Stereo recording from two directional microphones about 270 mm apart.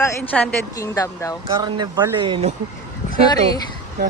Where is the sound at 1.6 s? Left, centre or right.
Centre.